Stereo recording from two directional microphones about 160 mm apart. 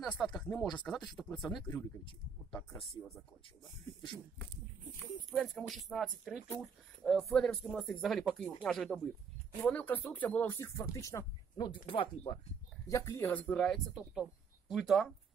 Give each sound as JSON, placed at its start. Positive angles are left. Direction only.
{"t": 0.0, "sound": "speech", "side_deg": 5}
{"t": 5.3, "sound": "speech", "side_deg": 0}
{"t": 11.5, "sound": "speech", "side_deg": 30}
{"t": 12.8, "sound": "speech", "side_deg": 20}